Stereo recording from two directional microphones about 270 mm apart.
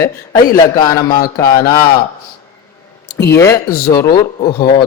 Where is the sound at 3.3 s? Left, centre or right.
Centre.